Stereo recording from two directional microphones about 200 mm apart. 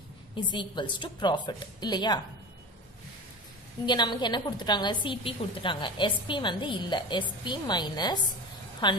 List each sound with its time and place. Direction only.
0.4 s a woman's voice: 25° left (ahead or behind)
3.8 s a woman's voice: 20° left (ahead or behind)